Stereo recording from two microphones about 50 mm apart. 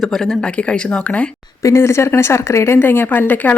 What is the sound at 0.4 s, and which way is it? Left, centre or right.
Speech, left.